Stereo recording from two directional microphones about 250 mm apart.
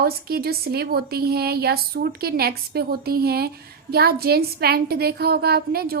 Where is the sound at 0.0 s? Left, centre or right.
Right.